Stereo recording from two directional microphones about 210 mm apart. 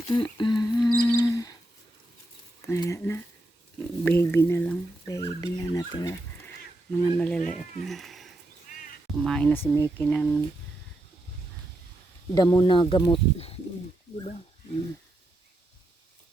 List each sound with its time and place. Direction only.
0.1 s speech: 20° left (ahead or behind)
0.9 s music: 15° left (ahead or behind)
2.6 s speech: 15° left (ahead or behind)
7.0 s speech: 5° left (ahead or behind)
12.3 s speech: 20° left (ahead or behind)